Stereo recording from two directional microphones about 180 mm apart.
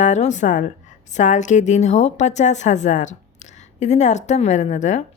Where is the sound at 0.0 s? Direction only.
40° left (ahead or behind).